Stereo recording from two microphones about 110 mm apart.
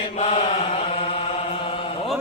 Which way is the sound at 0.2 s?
70° left (ahead or behind).